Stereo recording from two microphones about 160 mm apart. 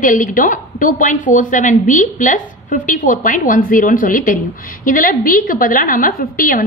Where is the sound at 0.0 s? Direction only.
55° left (ahead or behind).